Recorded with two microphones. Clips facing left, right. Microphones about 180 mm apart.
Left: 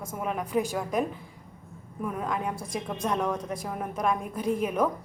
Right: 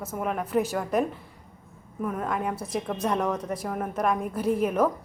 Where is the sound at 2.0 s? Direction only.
Centre (ahead or behind).